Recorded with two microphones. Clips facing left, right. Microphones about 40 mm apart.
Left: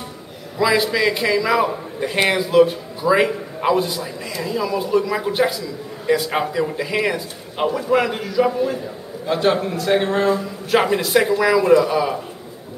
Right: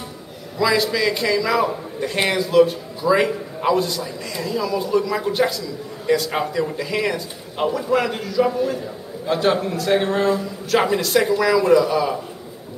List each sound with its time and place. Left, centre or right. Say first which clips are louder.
0.6 s a man's voice: left 1 dB; centre